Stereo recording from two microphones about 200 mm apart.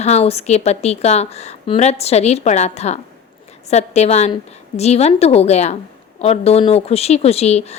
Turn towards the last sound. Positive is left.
turn(degrees=30)  # may be behind; listen again after turning